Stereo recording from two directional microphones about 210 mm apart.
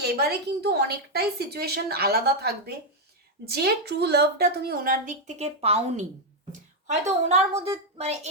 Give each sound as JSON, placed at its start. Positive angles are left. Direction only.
{"t": 0.0, "sound": "a woman's voice", "side_deg": -50}